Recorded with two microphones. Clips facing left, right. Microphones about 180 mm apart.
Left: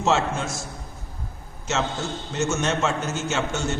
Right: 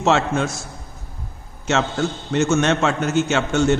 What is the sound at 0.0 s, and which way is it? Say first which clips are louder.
Speech: right 4 dB; 65° right (ahead or behind).